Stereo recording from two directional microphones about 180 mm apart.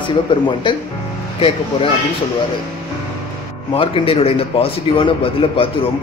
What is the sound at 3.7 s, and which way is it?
A man's voice, 30° left (ahead or behind).